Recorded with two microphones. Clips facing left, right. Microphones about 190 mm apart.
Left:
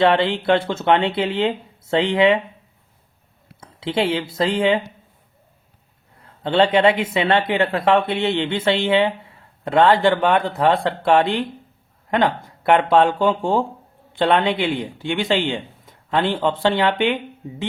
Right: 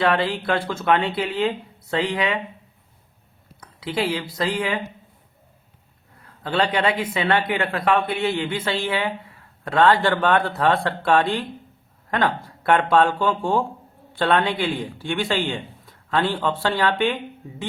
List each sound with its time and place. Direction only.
0.0 s speech: 25° left (ahead or behind)
3.6 s speech: 25° left (ahead or behind)
6.1 s speech: 25° left (ahead or behind)